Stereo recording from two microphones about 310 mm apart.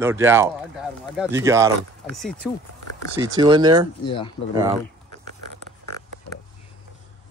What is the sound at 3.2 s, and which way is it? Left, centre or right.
Speech, centre.